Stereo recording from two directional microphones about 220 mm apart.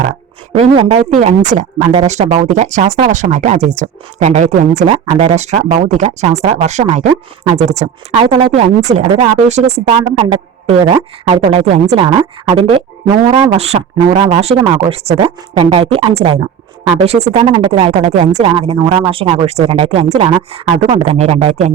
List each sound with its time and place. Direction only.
0.5 s speech: 30° right (ahead or behind)